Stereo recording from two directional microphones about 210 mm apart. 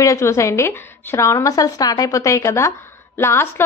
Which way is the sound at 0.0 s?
15° left (ahead or behind).